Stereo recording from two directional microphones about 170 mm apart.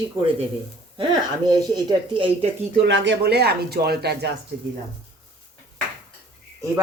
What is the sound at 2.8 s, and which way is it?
Speech, 90° right.